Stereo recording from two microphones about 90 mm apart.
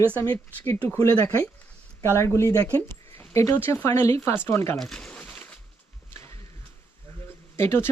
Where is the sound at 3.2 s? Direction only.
35° left (ahead or behind).